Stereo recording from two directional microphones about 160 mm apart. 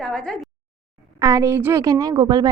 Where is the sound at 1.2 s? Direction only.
20° right (ahead or behind).